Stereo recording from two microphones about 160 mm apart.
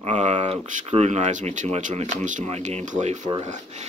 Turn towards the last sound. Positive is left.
turn(degrees=-45)  # may be behind; listen again after turning